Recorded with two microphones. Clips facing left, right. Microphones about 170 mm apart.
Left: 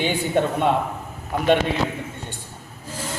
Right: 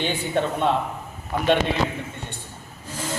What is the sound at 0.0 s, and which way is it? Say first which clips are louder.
Speech: left 3 dB; 15° left (ahead or behind).